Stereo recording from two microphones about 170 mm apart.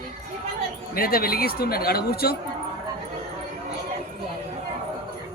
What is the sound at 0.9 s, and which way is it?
Speech, 60° left (ahead or behind).